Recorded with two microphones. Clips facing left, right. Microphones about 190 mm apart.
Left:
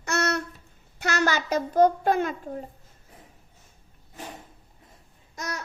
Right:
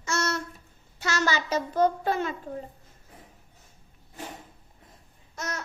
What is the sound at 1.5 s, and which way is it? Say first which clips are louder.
Speech: left 5 dB; 45° left (ahead or behind).